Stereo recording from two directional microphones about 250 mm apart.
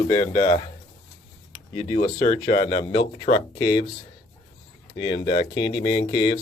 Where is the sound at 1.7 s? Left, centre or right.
Centre.